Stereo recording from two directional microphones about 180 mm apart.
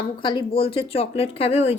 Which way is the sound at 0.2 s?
25° left (ahead or behind).